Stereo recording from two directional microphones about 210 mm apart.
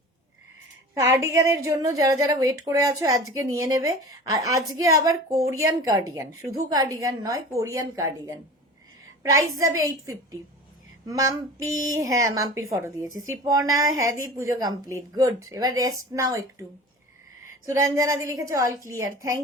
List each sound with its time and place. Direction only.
0.9 s a woman's voice: 15° right (ahead or behind)
11.0 s a woman's voice: 15° right (ahead or behind)
17.7 s a woman's voice: 15° right (ahead or behind)